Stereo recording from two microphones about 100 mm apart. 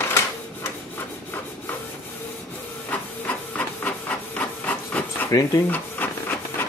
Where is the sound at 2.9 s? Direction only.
15° left (ahead or behind).